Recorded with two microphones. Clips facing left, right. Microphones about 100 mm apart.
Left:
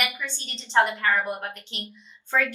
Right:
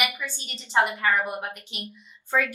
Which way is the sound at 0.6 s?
15° right (ahead or behind).